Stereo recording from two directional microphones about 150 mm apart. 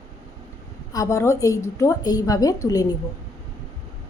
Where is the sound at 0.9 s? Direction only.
20° left (ahead or behind).